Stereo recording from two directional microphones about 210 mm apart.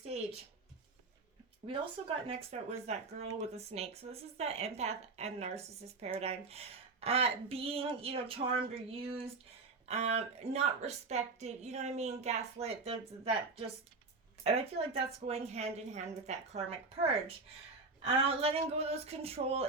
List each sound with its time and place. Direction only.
1.6 s a woman's voice: 25° right (ahead or behind)
14.4 s speech: 30° right (ahead or behind)